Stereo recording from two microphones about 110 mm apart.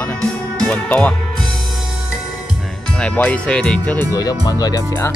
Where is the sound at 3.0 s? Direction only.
10° left (ahead or behind).